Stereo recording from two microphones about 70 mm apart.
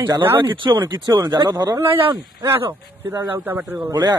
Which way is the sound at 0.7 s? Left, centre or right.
Right.